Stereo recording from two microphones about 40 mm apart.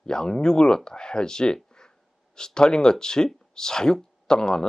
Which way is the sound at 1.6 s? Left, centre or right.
Centre.